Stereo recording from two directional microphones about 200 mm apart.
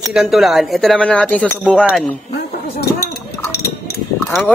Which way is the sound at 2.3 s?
55° left (ahead or behind).